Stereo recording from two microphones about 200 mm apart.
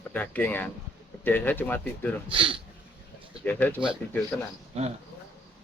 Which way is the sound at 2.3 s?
25° right (ahead or behind).